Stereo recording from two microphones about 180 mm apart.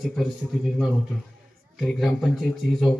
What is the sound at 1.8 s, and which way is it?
Speech, centre (ahead or behind).